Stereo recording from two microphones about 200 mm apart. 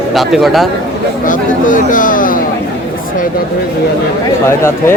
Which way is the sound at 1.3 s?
40° left (ahead or behind).